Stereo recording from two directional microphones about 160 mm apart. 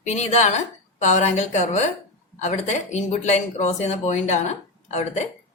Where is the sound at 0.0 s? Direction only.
45° left (ahead or behind).